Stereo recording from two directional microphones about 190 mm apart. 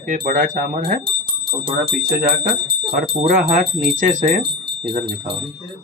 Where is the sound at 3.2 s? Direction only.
45° right (ahead or behind).